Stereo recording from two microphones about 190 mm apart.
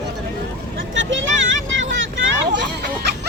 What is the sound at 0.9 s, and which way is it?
Vehicle, 90° right.